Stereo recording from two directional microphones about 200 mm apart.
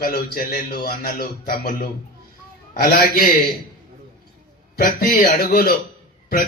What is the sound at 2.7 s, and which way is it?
Speech, 45° left (ahead or behind).